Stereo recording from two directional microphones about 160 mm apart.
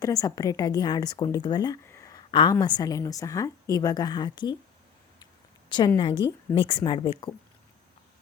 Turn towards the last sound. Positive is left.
turn(degrees=30)  # may be behind; listen again after turning